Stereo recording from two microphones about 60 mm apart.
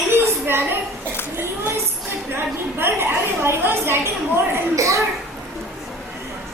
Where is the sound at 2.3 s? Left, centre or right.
Right.